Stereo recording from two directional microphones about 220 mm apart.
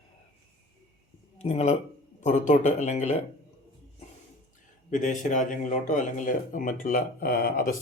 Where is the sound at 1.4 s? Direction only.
30° left (ahead or behind).